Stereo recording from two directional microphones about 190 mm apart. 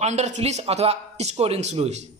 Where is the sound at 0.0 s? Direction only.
35° right (ahead or behind).